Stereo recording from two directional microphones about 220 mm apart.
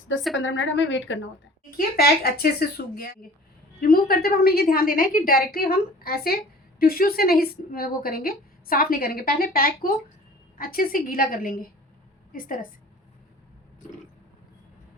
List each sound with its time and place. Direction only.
0.3 s speech: 60° left (ahead or behind)
2.0 s a woman's voice: 45° left (ahead or behind)